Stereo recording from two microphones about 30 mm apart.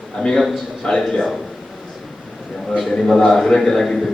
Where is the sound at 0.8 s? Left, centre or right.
Centre.